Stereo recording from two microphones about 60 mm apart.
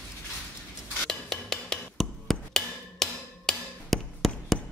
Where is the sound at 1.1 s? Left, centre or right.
Centre.